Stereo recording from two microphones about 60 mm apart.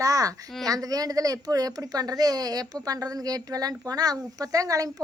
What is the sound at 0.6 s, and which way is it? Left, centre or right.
A woman's voice, right.